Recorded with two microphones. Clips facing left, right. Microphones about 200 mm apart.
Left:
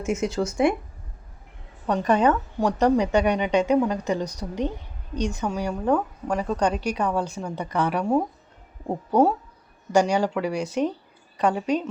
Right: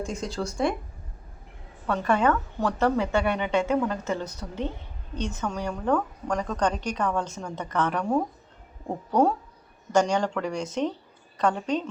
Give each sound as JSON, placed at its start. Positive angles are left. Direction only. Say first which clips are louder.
{"t": 0.0, "sound": "speech", "louder": "left 6 dB", "side_deg": 20}
{"t": 1.9, "sound": "speech", "louder": "left 3 dB", "side_deg": 20}
{"t": 9.9, "sound": "speech", "louder": "left 2 dB", "side_deg": 10}